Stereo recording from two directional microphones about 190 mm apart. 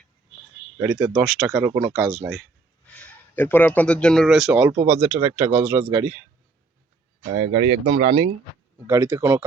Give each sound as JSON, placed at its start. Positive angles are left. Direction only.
{"t": 0.8, "sound": "speech", "side_deg": -10}
{"t": 7.3, "sound": "speech", "side_deg": -25}
{"t": 8.9, "sound": "speech", "side_deg": -15}